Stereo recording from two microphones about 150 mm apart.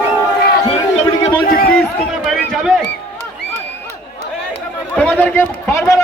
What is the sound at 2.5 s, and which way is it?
Speech, 5° right (ahead or behind).